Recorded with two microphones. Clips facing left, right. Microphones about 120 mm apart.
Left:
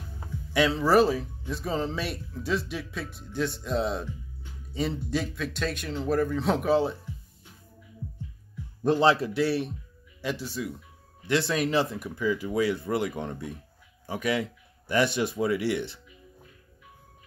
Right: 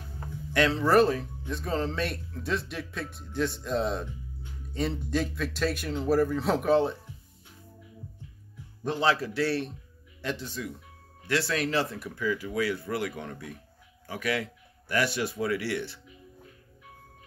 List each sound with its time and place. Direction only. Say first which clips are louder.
0.2 s speech: left 1 dB; 5° left (ahead or behind)
9.0 s a man's voice: left 1 dB; 25° left (ahead or behind)
11.2 s speech: left 2 dB; 20° left (ahead or behind)